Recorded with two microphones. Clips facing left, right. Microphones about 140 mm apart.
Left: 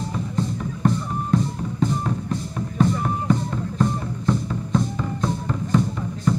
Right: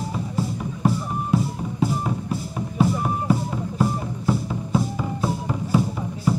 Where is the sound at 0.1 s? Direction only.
10° right (ahead or behind).